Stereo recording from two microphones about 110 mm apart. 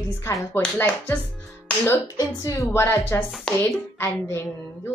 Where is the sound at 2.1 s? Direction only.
25° left (ahead or behind).